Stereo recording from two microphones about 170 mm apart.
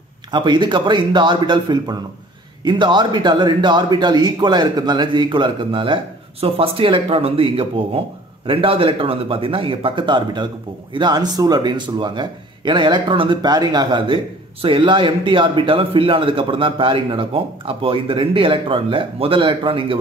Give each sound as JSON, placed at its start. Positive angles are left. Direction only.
{"t": 0.3, "sound": "a man's voice", "side_deg": -25}